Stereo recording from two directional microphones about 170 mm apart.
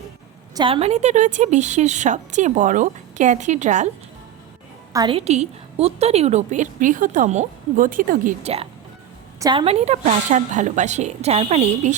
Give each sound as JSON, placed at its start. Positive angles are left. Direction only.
{"t": 0.5, "sound": "a woman's voice", "side_deg": -30}
{"t": 4.9, "sound": "a woman's voice", "side_deg": -30}
{"t": 9.4, "sound": "a woman's voice", "side_deg": -25}